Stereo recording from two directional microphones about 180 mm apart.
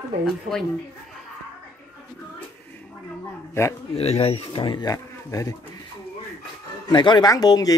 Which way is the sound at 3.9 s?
35° left (ahead or behind).